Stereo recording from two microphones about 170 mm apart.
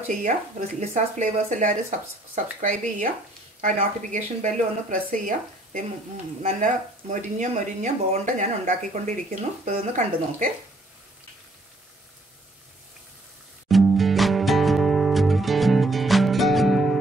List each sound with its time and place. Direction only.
0.2 s speech: 45° right (ahead or behind)
13.7 s music: centre (ahead or behind)